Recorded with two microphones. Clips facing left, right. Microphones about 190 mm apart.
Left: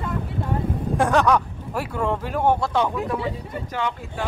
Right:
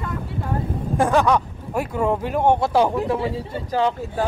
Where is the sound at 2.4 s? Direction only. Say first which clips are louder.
Right 3 dB; 25° right (ahead or behind).